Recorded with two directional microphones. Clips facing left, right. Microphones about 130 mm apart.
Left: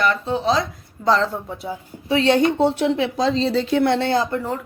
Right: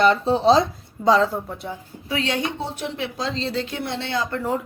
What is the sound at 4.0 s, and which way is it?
Speech, 40° left (ahead or behind).